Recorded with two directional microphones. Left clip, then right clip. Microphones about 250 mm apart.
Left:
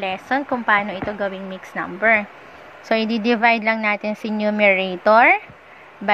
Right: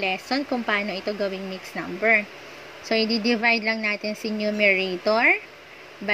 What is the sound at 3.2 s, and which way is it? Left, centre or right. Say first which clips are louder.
Speech: left 5 dB; centre.